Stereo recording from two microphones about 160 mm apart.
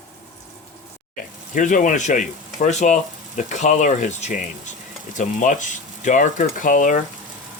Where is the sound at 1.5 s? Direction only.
55° left (ahead or behind).